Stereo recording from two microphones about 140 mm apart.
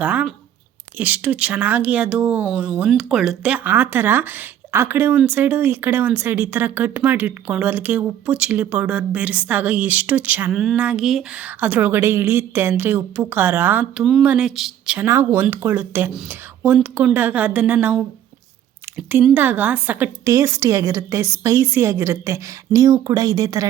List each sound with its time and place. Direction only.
0.0 s speech: 10° right (ahead or behind)
14.9 s a woman's voice: 15° right (ahead or behind)